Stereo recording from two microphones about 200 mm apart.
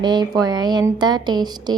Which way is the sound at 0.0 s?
20° right (ahead or behind).